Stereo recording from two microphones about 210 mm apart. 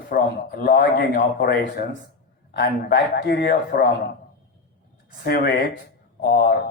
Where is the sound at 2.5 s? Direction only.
50° left (ahead or behind).